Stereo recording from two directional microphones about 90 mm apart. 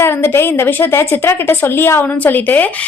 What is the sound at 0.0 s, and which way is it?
A woman's voice, 25° left (ahead or behind).